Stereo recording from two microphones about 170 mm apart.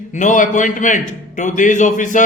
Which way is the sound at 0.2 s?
50° left (ahead or behind).